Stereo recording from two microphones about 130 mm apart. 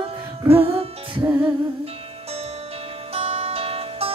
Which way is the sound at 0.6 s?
45° right (ahead or behind).